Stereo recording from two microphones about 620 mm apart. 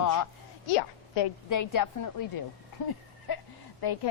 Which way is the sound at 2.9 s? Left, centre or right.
Left.